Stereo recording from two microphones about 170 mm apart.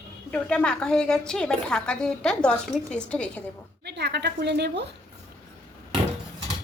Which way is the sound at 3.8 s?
80° right.